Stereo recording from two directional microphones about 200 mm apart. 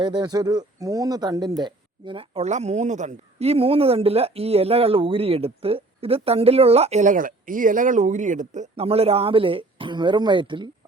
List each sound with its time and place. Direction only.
0.0 s speech: 20° right (ahead or behind)